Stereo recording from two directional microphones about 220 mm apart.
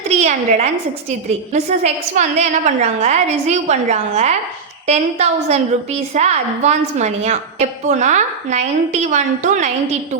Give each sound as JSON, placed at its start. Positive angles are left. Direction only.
{"t": 0.1, "sound": "a woman's voice", "side_deg": -30}